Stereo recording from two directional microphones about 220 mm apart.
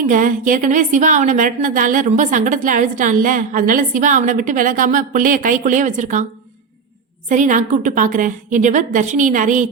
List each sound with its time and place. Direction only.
0.0 s a woman's voice: 35° right (ahead or behind)
7.3 s a woman's voice: 35° right (ahead or behind)